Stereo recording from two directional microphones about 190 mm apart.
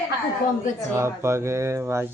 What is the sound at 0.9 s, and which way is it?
A man's voice, 15° right (ahead or behind).